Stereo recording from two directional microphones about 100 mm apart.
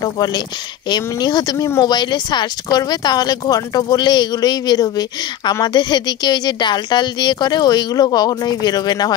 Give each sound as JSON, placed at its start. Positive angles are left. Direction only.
{"t": 0.0, "sound": "speech", "side_deg": 45}